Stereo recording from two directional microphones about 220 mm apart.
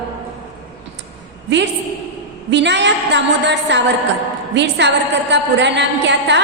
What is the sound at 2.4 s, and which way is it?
A woman's voice, 55° right (ahead or behind).